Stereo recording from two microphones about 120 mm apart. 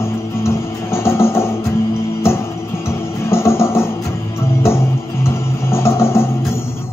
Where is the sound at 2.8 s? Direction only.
20° left (ahead or behind).